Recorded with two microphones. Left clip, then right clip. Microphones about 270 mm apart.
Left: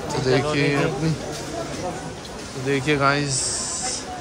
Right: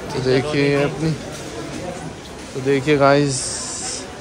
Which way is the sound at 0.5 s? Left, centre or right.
Centre.